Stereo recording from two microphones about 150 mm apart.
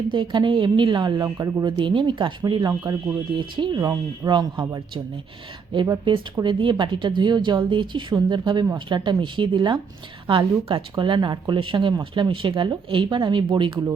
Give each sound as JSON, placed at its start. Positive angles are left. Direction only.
{"t": 0.1, "sound": "speech", "side_deg": -30}
{"t": 1.6, "sound": "speech", "side_deg": -35}